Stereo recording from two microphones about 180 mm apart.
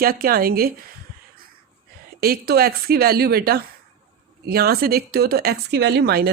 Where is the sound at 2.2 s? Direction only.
60° right (ahead or behind).